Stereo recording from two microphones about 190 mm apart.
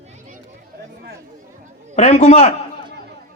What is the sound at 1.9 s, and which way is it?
Speech, 35° left (ahead or behind).